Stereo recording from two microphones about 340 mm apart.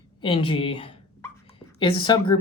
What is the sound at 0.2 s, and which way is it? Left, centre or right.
Speech, centre.